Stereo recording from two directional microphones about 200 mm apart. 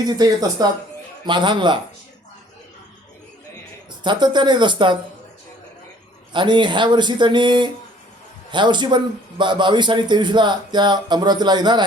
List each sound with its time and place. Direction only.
0.0 s speech: 20° right (ahead or behind)
4.0 s speech: 20° right (ahead or behind)
6.3 s speech: 25° right (ahead or behind)